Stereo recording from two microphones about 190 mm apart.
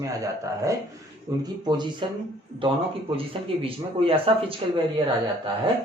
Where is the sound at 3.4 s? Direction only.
30° right (ahead or behind).